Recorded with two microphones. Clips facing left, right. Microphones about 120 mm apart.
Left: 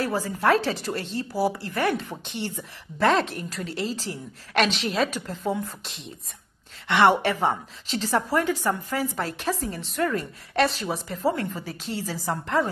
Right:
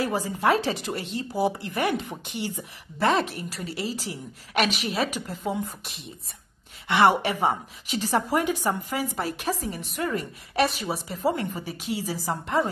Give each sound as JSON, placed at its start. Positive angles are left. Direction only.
{"t": 0.0, "sound": "a woman's voice", "side_deg": -15}
{"t": 3.0, "sound": "a woman's voice", "side_deg": 0}
{"t": 7.0, "sound": "a woman's voice", "side_deg": -10}